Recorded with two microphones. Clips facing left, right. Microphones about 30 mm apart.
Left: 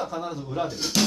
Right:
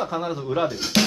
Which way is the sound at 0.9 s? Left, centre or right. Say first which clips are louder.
Right 3 dB; right.